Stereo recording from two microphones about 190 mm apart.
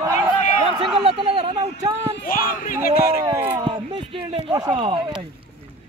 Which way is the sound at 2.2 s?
50° left (ahead or behind).